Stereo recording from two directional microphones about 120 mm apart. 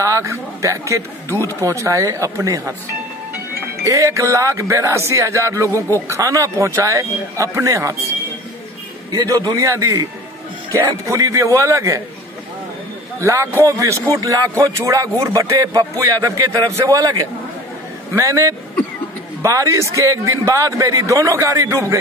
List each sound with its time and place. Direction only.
0.0 s speech: 25° right (ahead or behind)
3.8 s speech: 25° right (ahead or behind)
9.1 s speech: 30° right (ahead or behind)
13.2 s speech: 25° right (ahead or behind)